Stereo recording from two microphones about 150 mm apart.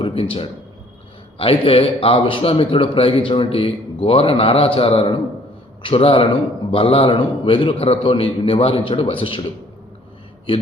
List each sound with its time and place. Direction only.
0.0 s a man's voice: 35° left (ahead or behind)